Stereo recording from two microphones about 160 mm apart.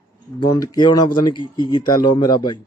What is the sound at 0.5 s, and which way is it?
Speech, 25° left (ahead or behind).